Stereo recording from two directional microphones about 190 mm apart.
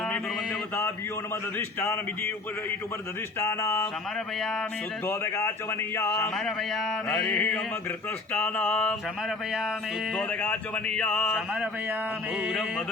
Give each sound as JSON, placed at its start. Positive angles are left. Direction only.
{"t": 1.5, "sound": "speech", "side_deg": 10}
{"t": 3.4, "sound": "speech", "side_deg": 15}
{"t": 5.0, "sound": "speech", "side_deg": 15}
{"t": 6.3, "sound": "a man's voice", "side_deg": 0}
{"t": 10.2, "sound": "speech", "side_deg": 5}